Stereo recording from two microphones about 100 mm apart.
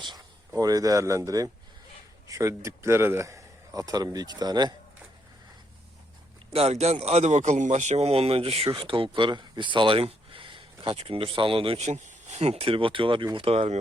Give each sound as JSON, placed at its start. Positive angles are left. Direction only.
{"t": 0.5, "sound": "a man's voice", "side_deg": -35}
{"t": 6.5, "sound": "speech", "side_deg": -85}
{"t": 12.4, "sound": "speech", "side_deg": -90}
{"t": 13.3, "sound": "speech", "side_deg": -75}